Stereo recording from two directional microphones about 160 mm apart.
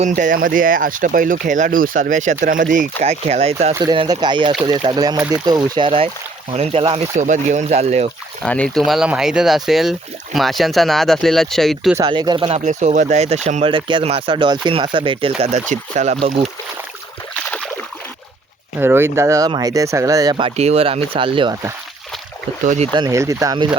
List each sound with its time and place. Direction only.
0.1 s speech: 60° right (ahead or behind)
3.0 s speech: 40° right (ahead or behind)
3.9 s speech: 25° right (ahead or behind)
7.2 s speech: 50° right (ahead or behind)
8.4 s speech: 5° left (ahead or behind)
11.9 s speech: 25° right (ahead or behind)
12.5 s speech: 45° right (ahead or behind)
13.7 s speech: 30° right (ahead or behind)
15.4 s speech: 45° right (ahead or behind)
18.8 s speech: 15° right (ahead or behind)
20.3 s speech: 40° right (ahead or behind)
22.6 s speech: 50° right (ahead or behind)
23.0 s speech: 20° right (ahead or behind)